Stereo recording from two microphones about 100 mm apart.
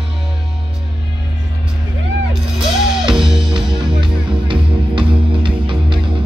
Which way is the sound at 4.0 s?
60° right (ahead or behind).